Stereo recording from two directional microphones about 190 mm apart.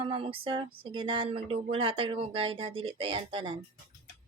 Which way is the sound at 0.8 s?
25° right (ahead or behind).